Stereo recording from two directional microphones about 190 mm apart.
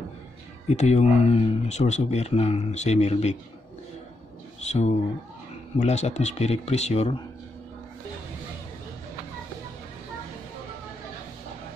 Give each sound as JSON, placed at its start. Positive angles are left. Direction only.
{"t": 0.7, "sound": "speech", "side_deg": 35}
{"t": 4.6, "sound": "speech", "side_deg": 35}